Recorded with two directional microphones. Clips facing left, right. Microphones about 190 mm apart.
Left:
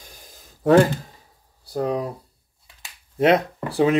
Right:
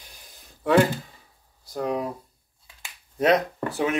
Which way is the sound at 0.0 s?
45° left (ahead or behind).